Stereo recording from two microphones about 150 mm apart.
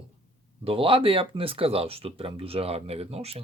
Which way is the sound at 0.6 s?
35° right (ahead or behind).